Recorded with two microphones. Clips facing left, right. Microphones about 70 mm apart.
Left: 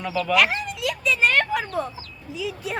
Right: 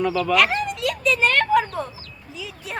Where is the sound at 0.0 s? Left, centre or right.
Centre.